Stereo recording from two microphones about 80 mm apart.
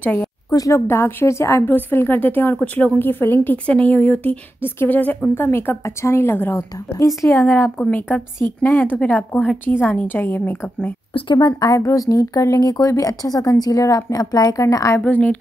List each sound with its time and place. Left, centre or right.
0.0 s a woman's voice: left
0.5 s speech: left
0.7 s a woman's voice: left
1.7 s speech: left
7.0 s a woman's voice: left
7.3 s speech: left
11.4 s speech: left
15.0 s speech: centre